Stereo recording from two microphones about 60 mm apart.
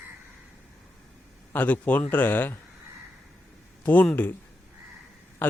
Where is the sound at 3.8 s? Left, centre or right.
Left.